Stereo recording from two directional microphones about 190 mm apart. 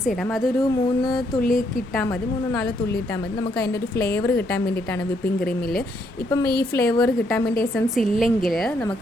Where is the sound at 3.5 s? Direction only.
55° left (ahead or behind).